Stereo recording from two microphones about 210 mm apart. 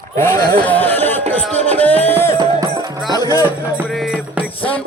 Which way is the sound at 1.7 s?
10° left (ahead or behind).